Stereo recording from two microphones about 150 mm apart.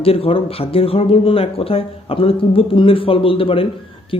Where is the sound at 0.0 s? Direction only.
40° left (ahead or behind).